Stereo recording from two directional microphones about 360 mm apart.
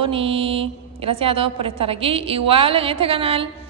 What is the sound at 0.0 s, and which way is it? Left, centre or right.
A woman's voice, centre.